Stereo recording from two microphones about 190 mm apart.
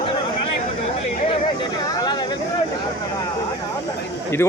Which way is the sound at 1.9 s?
20° left (ahead or behind).